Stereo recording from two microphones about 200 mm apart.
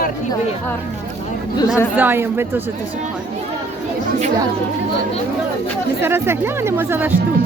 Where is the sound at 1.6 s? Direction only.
15° left (ahead or behind).